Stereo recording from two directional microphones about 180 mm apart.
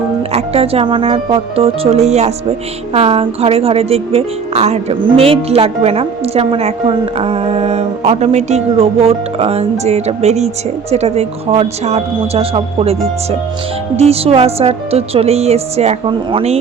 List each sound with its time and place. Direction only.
0.3 s a woman's voice: 35° right (ahead or behind)